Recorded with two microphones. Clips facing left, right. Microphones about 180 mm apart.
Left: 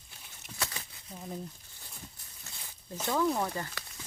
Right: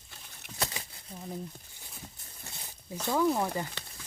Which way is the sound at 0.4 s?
65° right (ahead or behind).